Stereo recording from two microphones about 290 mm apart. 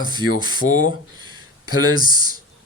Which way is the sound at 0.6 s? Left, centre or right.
Left.